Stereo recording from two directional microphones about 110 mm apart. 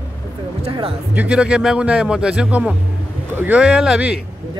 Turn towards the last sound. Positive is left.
turn(degrees=-10)  # may be behind; listen again after turning